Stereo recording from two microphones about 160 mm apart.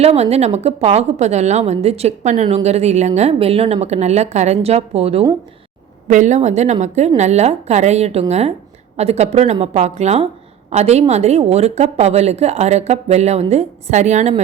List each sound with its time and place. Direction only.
0.0 s speech: 40° right (ahead or behind)